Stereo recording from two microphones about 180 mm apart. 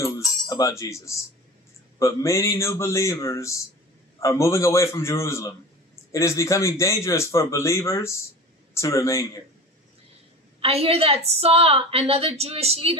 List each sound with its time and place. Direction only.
0.5 s cutlery: 20° left (ahead or behind)
2.0 s a man's voice: 15° left (ahead or behind)
10.6 s a woman's voice: 35° right (ahead or behind)